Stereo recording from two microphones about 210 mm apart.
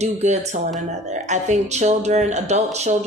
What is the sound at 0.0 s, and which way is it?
Speech, 35° right (ahead or behind).